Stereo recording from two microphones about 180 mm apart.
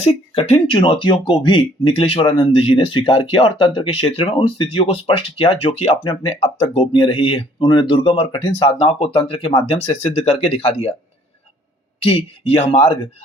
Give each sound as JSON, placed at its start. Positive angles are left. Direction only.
{"t": 0.0, "sound": "speech", "side_deg": 35}
{"t": 12.0, "sound": "speech", "side_deg": 35}